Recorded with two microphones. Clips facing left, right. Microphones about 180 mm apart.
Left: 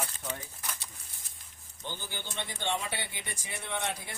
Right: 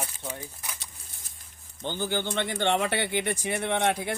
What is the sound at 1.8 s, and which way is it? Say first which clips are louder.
Speech: right 12 dB; 75° right (ahead or behind).